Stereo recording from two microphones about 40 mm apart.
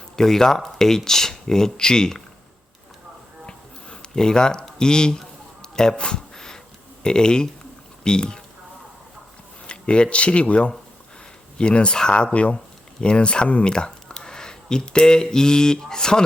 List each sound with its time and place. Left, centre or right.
0.2 s speech: centre
3.4 s music: centre
4.8 s speech: centre
5.6 s a sound: centre
7.0 s speech: centre
9.6 s speech: left